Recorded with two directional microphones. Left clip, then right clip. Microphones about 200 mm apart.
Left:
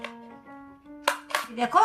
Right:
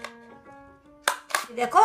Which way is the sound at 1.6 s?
35° right (ahead or behind).